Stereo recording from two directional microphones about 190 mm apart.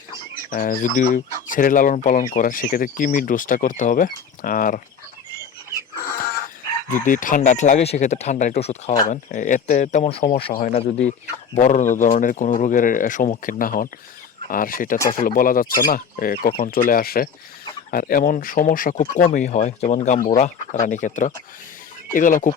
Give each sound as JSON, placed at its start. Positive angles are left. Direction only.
{"t": 0.5, "sound": "speech", "side_deg": 45}
{"t": 6.9, "sound": "speech", "side_deg": 45}
{"t": 10.0, "sound": "speech", "side_deg": 30}